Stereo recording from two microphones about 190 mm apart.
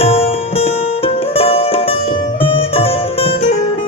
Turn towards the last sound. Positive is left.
turn(degrees=30)  # may be behind; listen again after turning